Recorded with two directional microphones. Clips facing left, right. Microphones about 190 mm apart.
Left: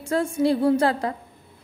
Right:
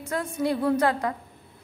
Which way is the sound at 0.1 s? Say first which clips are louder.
Left 5 dB; 30° left (ahead or behind).